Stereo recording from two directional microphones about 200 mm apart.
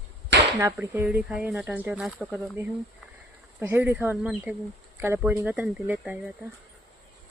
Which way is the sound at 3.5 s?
10° right (ahead or behind).